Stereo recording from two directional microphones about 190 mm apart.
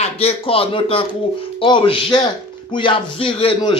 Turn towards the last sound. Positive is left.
turn(degrees=30)  # may be behind; listen again after turning